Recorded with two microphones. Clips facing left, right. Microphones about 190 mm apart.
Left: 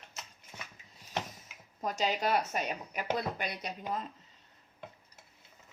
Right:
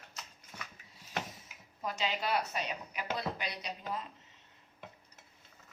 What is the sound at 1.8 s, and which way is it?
A woman's voice, 40° left (ahead or behind).